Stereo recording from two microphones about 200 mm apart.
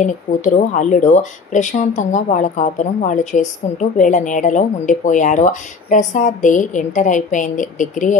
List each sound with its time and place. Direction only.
0.0 s speech: 40° left (ahead or behind)